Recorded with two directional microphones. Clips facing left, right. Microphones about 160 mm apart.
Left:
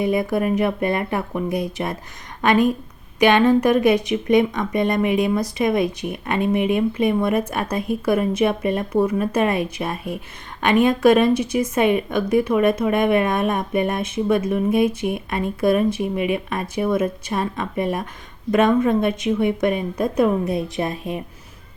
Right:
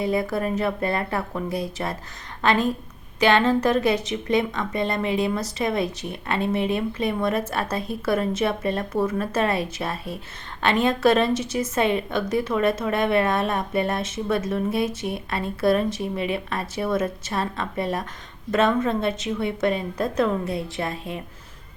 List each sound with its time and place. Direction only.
0.0 s speech: 20° left (ahead or behind)